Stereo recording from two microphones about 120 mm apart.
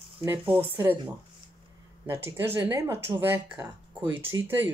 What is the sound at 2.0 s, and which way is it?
Speech, 20° right (ahead or behind).